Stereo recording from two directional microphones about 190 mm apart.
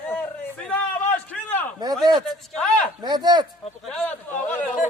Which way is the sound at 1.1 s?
10° left (ahead or behind).